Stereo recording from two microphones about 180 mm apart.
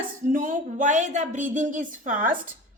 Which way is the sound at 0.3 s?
45° right (ahead or behind).